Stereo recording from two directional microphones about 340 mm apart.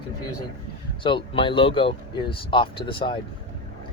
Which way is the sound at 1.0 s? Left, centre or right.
Centre.